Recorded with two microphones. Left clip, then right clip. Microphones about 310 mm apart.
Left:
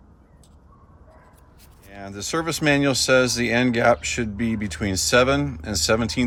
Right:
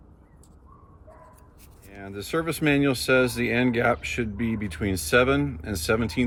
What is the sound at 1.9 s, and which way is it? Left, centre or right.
Speech, centre.